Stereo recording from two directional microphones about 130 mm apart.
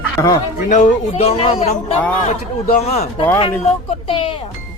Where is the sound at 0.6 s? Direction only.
75° left (ahead or behind); by 3.1 s 55° left (ahead or behind).